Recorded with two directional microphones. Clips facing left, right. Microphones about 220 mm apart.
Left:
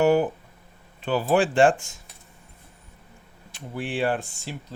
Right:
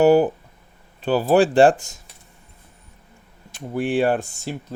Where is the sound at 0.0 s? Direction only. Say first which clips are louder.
Right 5 dB; 35° right (ahead or behind).